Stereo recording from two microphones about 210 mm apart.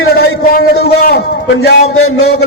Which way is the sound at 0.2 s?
50° left (ahead or behind).